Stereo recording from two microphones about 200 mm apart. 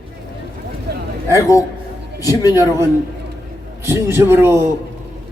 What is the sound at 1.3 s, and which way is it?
A man's voice, 15° left (ahead or behind).